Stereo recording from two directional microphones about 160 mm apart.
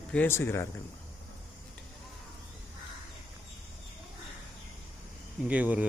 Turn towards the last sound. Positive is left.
turn(degrees=-10)  # may be behind; listen again after turning